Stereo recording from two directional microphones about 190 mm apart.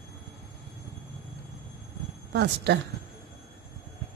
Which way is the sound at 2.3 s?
65° right (ahead or behind).